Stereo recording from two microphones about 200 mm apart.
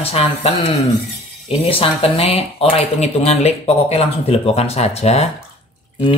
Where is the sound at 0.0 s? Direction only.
30° left (ahead or behind).